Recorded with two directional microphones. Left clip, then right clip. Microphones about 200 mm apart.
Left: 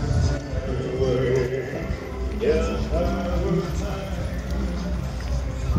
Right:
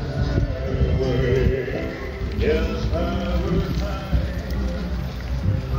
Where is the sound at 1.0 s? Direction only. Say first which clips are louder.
Even; 50° right (ahead or behind).